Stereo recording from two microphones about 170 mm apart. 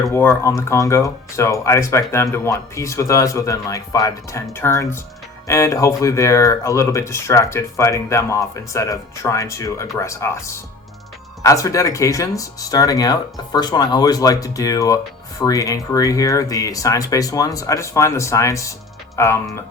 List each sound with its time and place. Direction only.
0.1 s speech: 15° left (ahead or behind)